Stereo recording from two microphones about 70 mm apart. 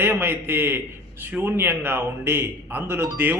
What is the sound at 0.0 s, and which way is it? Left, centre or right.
A man's voice, right.